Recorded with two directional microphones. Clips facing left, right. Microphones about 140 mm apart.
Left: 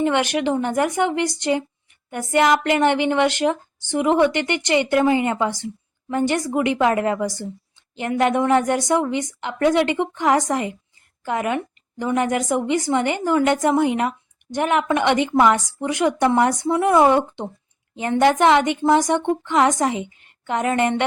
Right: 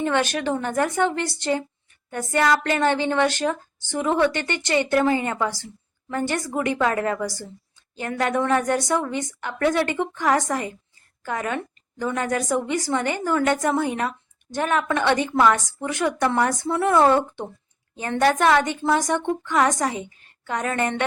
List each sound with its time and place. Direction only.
0.0 s a woman's voice: 20° left (ahead or behind)